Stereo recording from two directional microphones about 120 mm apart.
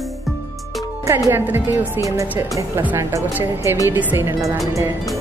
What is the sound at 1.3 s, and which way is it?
Speech, 15° right (ahead or behind).